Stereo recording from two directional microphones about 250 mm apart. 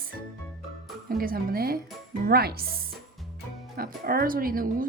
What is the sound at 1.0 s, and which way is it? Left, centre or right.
Speech, right.